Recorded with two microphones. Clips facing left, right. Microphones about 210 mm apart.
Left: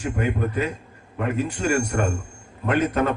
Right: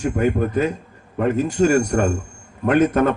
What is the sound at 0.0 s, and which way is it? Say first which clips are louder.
A man's voice: right 5 dB; 45° right (ahead or behind).